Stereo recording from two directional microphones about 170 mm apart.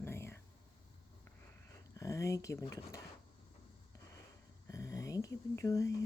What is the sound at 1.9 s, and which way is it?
Speech, 20° left (ahead or behind).